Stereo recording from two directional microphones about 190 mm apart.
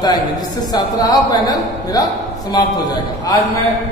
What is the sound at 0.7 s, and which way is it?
A woman's voice, 20° left (ahead or behind).